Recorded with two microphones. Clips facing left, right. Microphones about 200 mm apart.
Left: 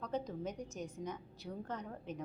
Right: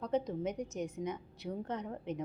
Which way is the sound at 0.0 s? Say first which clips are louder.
Right 6 dB; 20° right (ahead or behind).